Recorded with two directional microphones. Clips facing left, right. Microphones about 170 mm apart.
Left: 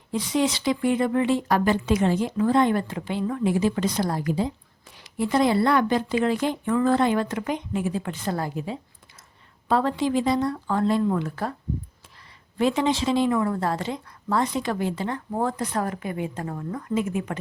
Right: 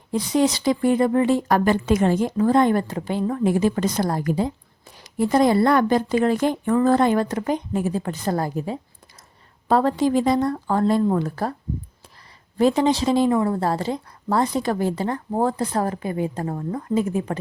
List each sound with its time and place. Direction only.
0.1 s a woman's voice: 40° right (ahead or behind)
12.5 s a woman's voice: 40° right (ahead or behind)